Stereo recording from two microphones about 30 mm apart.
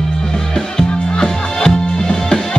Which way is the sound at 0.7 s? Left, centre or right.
Left.